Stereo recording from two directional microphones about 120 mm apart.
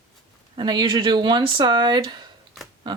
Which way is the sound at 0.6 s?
35° right (ahead or behind).